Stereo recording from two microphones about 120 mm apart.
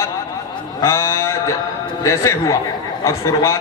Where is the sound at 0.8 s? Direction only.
20° left (ahead or behind).